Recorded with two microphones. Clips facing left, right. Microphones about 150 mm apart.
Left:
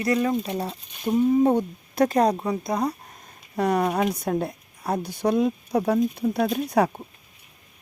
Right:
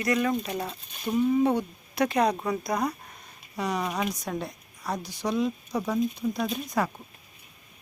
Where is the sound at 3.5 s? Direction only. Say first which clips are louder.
Left 7 dB; 55° left (ahead or behind).